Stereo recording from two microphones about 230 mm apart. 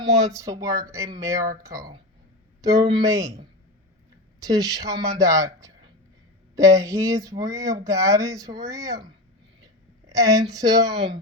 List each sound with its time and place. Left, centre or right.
0.3 s speech: centre